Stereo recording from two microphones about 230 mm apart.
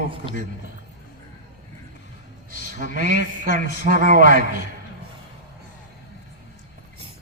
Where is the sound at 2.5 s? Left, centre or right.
Left.